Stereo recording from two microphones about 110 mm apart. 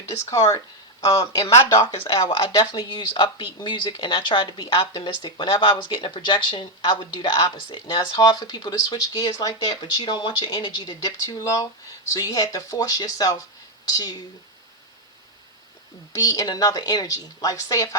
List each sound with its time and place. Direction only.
0.3 s speech: 30° left (ahead or behind)
2.2 s speech: 45° left (ahead or behind)
11.0 s speech: 35° left (ahead or behind)
16.1 s speech: 35° left (ahead or behind)